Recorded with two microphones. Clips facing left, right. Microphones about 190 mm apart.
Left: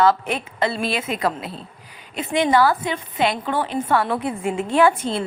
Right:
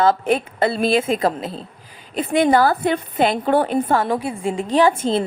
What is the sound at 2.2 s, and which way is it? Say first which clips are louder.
A woman's voice: right 2 dB; 55° right (ahead or behind).